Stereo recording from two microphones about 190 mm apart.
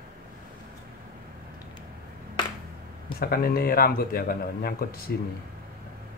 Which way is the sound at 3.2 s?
50° left (ahead or behind).